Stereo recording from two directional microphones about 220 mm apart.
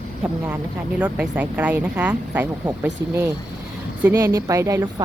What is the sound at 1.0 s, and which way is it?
Speech, 5° right (ahead or behind).